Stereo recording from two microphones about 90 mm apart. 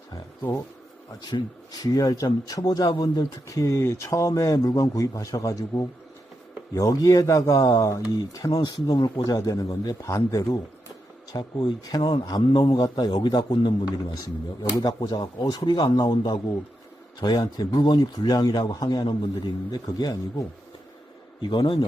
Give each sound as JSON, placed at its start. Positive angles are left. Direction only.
{"t": 1.2, "sound": "a man's voice", "side_deg": 50}
{"t": 3.4, "sound": "a man's voice", "side_deg": 35}
{"t": 13.1, "sound": "a man's voice", "side_deg": 65}
{"t": 14.6, "sound": "a man's voice", "side_deg": 45}
{"t": 17.2, "sound": "a man's voice", "side_deg": 50}
{"t": 17.7, "sound": "a man's voice", "side_deg": 60}
{"t": 21.5, "sound": "a man's voice", "side_deg": 65}